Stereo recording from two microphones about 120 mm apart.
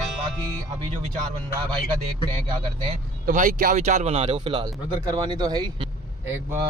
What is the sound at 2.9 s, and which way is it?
Speech, 70° right (ahead or behind).